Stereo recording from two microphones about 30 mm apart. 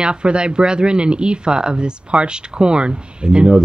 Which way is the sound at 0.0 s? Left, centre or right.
Right.